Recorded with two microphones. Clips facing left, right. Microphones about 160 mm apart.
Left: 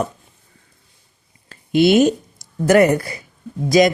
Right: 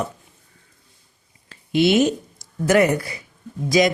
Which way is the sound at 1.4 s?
50° left (ahead or behind).